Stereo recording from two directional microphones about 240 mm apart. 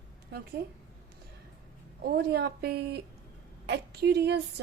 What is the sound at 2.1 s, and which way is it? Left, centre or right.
A woman's voice, right.